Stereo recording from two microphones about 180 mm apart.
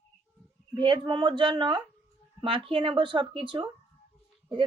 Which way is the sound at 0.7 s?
25° right (ahead or behind).